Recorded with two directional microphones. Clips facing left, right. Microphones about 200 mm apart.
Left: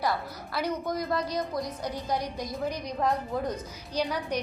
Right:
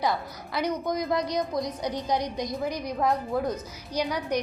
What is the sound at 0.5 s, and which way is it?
A woman's voice, 15° right (ahead or behind).